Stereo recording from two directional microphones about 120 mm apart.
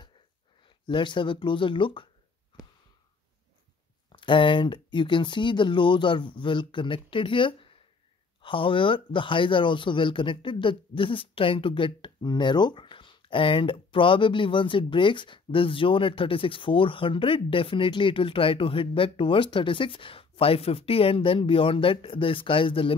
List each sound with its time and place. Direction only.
0.7 s speech: 40° left (ahead or behind)
4.1 s speech: 45° left (ahead or behind)